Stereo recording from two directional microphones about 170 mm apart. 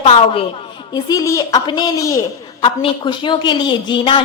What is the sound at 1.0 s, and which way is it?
A woman's voice, 20° left (ahead or behind).